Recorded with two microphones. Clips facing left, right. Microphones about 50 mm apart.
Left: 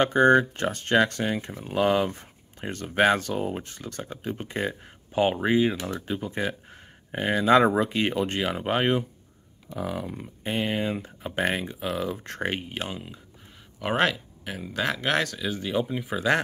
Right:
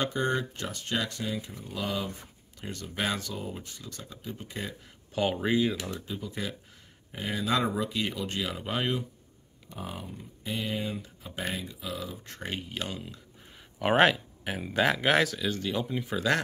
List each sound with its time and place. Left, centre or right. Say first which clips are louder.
0.0 s speech: left 10 dB; left
5.1 s speech: left 5 dB; left
5.9 s speech: left 6 dB; left
6.3 s speech: left 7 dB; left
9.9 s speech: left 8 dB; left
10.4 s speech: left 6 dB; left
12.5 s speech: left 3 dB; left
13.7 s speech: right 2 dB; centre